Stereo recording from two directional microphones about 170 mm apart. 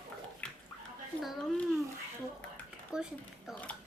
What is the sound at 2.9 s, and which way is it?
Speech, 5° right (ahead or behind).